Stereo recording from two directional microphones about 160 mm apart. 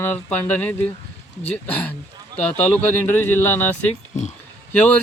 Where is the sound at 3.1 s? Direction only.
15° left (ahead or behind).